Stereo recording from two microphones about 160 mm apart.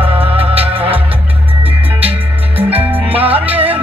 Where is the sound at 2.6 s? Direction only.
10° right (ahead or behind).